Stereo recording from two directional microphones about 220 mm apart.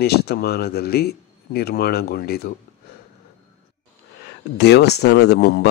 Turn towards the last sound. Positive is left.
turn(degrees=50)  # may be behind; listen again after turning